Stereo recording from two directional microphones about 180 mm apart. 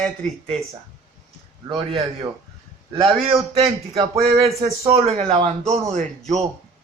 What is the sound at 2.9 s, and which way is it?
Speech, 30° right (ahead or behind).